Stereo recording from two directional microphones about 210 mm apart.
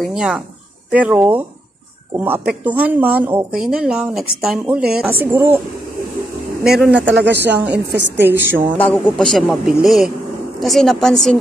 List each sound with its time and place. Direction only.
0.0 s speech: 5° right (ahead or behind)
6.6 s speech: centre (ahead or behind)
7.2 s speech: 55° right (ahead or behind)
7.4 s speech: 5° right (ahead or behind)
8.7 s speech: 5° left (ahead or behind)